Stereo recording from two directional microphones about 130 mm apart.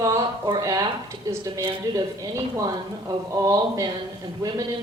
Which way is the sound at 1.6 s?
35° right (ahead or behind).